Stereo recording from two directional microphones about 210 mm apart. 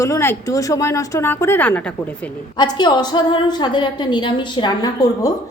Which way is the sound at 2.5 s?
20° left (ahead or behind).